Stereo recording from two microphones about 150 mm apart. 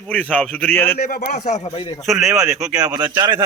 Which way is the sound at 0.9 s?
90° left.